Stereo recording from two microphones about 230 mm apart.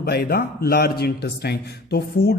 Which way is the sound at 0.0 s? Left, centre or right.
Left.